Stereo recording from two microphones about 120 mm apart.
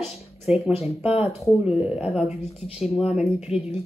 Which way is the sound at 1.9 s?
5° right (ahead or behind).